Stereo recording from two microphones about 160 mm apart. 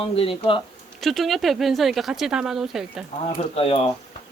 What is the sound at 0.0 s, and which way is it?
Speech, 35° left (ahead or behind).